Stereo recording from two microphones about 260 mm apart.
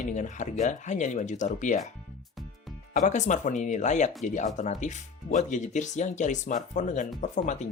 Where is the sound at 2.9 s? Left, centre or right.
Left.